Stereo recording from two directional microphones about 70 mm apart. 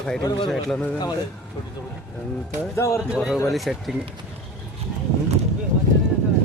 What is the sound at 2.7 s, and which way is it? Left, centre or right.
Speech, left.